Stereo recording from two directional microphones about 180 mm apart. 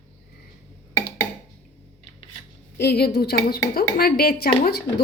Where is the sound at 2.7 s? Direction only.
65° left (ahead or behind).